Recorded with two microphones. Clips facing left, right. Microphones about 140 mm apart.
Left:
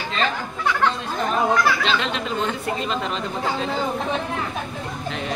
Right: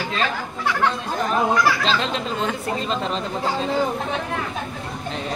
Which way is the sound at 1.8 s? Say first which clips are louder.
Right 1 dB; 35° right (ahead or behind).